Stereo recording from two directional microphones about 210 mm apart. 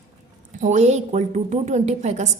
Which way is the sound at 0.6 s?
35° right (ahead or behind).